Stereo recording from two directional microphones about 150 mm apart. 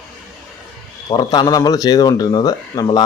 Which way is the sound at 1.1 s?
25° left (ahead or behind).